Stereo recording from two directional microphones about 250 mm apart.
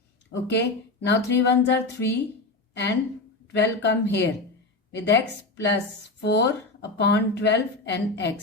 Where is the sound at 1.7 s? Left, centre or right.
Left.